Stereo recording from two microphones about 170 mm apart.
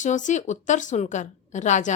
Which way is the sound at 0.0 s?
45° left (ahead or behind).